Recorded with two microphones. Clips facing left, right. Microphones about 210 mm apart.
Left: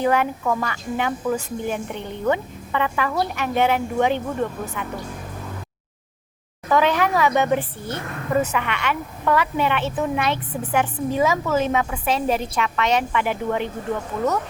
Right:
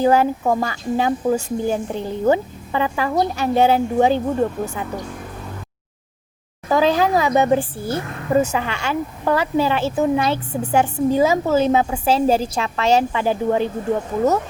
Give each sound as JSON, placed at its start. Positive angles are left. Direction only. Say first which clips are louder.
{"t": 0.0, "sound": "speech", "louder": "right 4 dB", "side_deg": -35}
{"t": 6.7, "sound": "speech", "louder": "right 3 dB", "side_deg": -30}